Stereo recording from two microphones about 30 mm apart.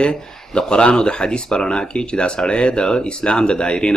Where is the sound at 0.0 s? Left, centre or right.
Left.